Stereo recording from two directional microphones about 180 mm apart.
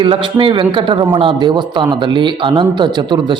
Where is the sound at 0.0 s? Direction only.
25° right (ahead or behind).